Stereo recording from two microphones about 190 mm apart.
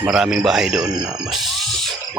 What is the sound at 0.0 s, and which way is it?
Speech, 5° right (ahead or behind).